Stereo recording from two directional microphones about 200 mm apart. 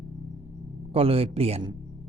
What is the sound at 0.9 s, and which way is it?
Speech, 30° right (ahead or behind).